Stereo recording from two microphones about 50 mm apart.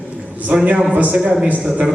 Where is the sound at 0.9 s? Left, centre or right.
Right.